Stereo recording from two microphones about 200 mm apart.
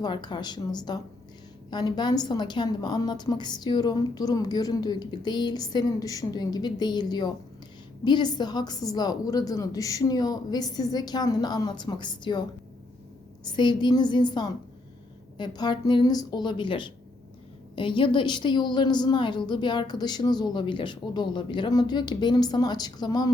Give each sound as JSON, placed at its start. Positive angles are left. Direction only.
{"t": 0.0, "sound": "a woman's voice", "side_deg": 20}